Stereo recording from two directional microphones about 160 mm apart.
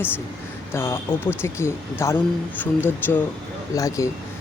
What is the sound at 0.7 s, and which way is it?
Speech, 15° left (ahead or behind).